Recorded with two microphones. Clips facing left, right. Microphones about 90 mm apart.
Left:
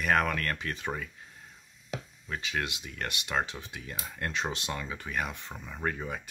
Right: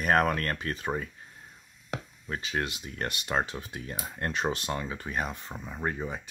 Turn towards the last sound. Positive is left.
turn(degrees=-25)  # may be behind; listen again after turning